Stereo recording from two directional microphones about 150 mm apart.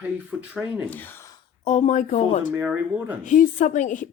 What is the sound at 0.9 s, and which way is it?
Speech, 15° left (ahead or behind).